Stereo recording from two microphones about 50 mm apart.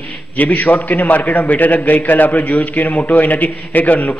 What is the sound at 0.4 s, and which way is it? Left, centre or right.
A man's voice, left.